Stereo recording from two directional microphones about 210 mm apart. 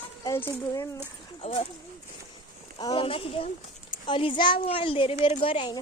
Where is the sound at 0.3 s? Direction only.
10° left (ahead or behind).